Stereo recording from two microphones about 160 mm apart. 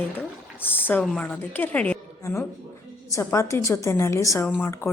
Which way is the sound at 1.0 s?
10° left (ahead or behind).